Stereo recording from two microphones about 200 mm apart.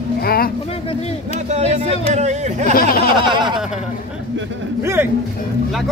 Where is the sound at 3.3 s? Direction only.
25° right (ahead or behind).